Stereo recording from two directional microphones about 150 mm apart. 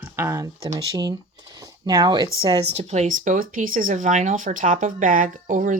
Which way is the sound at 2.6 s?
45° right (ahead or behind).